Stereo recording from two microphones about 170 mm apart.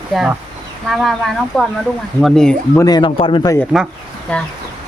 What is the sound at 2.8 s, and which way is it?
Speech, 25° left (ahead or behind).